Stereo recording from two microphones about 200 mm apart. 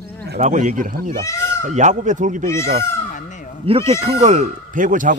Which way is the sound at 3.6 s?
30° right (ahead or behind).